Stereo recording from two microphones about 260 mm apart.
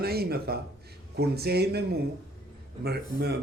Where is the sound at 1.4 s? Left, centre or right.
Right.